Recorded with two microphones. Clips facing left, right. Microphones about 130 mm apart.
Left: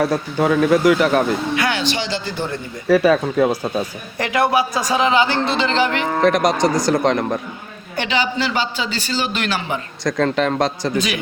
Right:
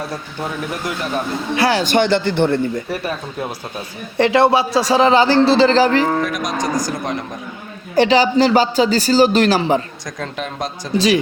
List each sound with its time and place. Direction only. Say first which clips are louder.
0.0 s speech: left 8 dB; 90° left
1.5 s a man's voice: right 4 dB; 35° right (ahead or behind)
1.8 s speech: right 7 dB; 55° right (ahead or behind)
2.9 s speech: left 10 dB; 90° left
4.2 s a man's voice: right 4 dB; 30° right (ahead or behind)
6.2 s speech: left 6 dB; 70° left (ahead or behind)
7.9 s a man's voice: right 8 dB; 35° right (ahead or behind)
10.0 s speech: left 9 dB; 70° left (ahead or behind); by 10.9 s 90° left
10.9 s a man's voice: right 6 dB; 35° right (ahead or behind)